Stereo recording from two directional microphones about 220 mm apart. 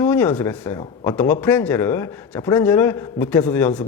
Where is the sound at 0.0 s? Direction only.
10° left (ahead or behind).